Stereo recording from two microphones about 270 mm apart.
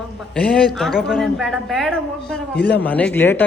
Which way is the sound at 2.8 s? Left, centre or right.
Centre.